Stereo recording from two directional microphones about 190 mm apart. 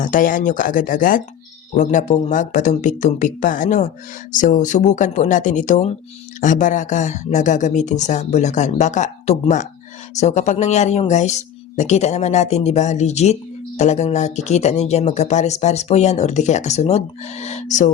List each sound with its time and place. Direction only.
0.0 s speech: 45° left (ahead or behind)